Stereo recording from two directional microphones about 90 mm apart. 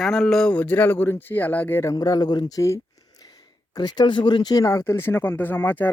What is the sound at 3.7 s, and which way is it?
Speech, 50° left (ahead or behind).